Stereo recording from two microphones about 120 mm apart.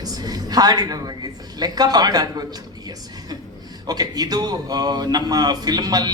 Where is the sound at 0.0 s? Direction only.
35° right (ahead or behind).